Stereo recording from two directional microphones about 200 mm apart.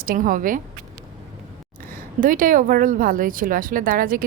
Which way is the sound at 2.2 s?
40° right (ahead or behind).